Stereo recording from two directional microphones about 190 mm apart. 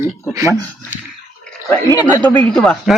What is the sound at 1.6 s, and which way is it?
Speech, 15° left (ahead or behind).